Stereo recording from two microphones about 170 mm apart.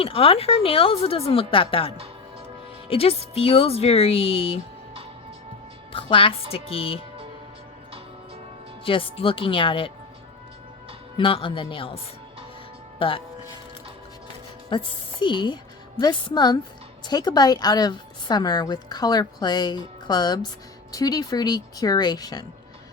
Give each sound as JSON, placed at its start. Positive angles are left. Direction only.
{"t": 0.0, "sound": "a woman's voice", "side_deg": 35}
{"t": 2.9, "sound": "a woman's voice", "side_deg": 35}
{"t": 5.9, "sound": "a woman's voice", "side_deg": 30}
{"t": 8.8, "sound": "a woman's voice", "side_deg": 30}
{"t": 11.2, "sound": "a woman's voice", "side_deg": 30}
{"t": 13.0, "sound": "a woman's voice", "side_deg": 30}
{"t": 14.7, "sound": "a woman's voice", "side_deg": 30}